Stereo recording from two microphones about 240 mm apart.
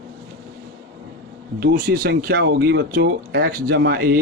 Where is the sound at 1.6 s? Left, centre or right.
Right.